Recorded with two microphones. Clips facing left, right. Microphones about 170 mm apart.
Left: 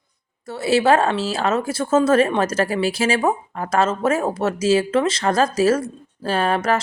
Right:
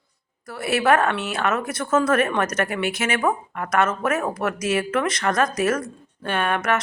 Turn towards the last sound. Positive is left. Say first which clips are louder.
# left 3 dB
turn(degrees=30)  # may be behind; listen again after turning